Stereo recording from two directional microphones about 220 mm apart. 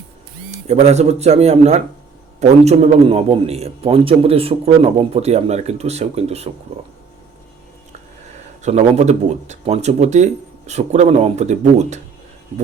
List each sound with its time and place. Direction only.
0.7 s a man's voice: 30° right (ahead or behind)
8.6 s speech: 30° right (ahead or behind)